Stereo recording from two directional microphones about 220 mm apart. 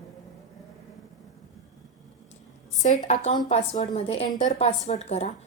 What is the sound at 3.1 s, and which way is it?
A woman's voice, 30° left (ahead or behind).